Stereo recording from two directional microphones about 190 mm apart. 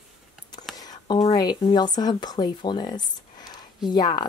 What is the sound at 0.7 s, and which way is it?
A woman's voice, 20° left (ahead or behind).